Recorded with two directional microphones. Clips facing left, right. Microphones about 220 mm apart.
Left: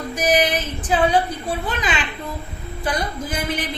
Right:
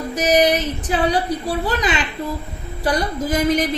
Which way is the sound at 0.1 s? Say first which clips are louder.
Right 4 dB; 40° right (ahead or behind).